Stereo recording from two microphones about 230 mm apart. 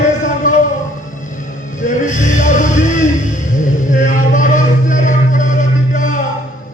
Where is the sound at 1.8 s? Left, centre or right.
Left.